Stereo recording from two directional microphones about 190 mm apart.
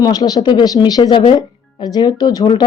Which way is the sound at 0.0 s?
20° left (ahead or behind).